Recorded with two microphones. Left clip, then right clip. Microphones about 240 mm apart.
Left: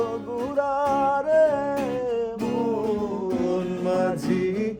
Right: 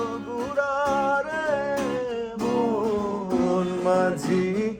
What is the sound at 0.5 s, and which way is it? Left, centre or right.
Music, left.